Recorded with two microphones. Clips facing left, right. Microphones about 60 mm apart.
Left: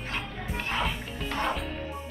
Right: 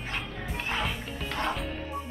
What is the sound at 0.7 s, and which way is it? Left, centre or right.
Music, centre.